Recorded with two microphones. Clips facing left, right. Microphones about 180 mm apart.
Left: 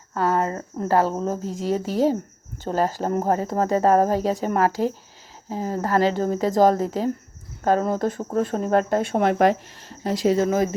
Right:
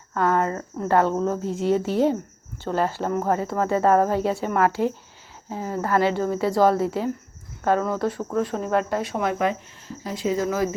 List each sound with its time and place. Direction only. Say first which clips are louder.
0.1 s speech: even; 35° left (ahead or behind); by 10.3 s 70° left (ahead or behind)
10.3 s speech: even; 25° left (ahead or behind)